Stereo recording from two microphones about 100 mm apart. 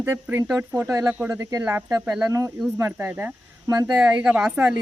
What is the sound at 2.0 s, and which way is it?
Speech, 10° right (ahead or behind).